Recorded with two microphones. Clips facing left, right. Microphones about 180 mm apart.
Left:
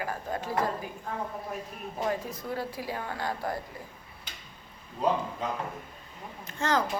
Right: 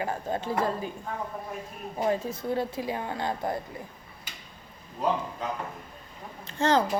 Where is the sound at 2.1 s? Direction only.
25° right (ahead or behind).